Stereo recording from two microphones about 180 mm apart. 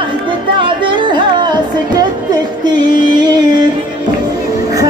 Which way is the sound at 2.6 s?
25° right (ahead or behind).